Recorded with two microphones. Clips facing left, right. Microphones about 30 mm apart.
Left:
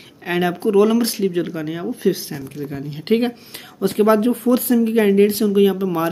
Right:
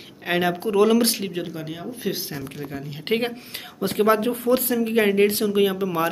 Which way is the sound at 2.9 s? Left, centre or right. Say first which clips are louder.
Left 5 dB; right.